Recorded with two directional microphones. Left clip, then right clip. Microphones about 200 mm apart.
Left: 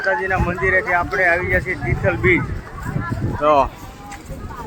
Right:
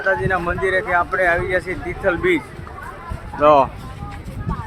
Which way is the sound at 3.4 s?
35° right (ahead or behind).